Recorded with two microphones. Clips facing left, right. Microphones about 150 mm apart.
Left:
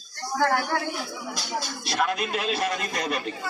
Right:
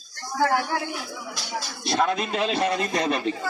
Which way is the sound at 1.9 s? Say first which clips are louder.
Right 3 dB; 25° right (ahead or behind).